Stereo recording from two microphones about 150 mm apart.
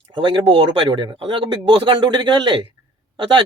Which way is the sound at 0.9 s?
30° right (ahead or behind).